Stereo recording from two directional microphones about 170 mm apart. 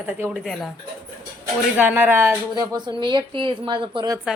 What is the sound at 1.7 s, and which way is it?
Speech, 10° right (ahead or behind).